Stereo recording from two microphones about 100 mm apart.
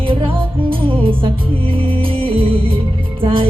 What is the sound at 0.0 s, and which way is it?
Music, 60° right (ahead or behind).